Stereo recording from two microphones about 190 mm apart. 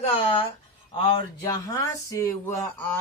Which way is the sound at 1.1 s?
15° left (ahead or behind).